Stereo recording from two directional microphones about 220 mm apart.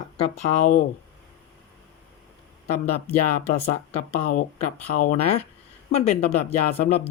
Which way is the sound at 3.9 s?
35° left (ahead or behind).